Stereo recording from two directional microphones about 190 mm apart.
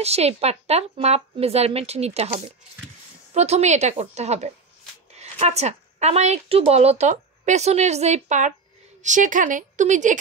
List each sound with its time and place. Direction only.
0.0 s speech: 35° right (ahead or behind)
3.3 s a woman's voice: 35° right (ahead or behind)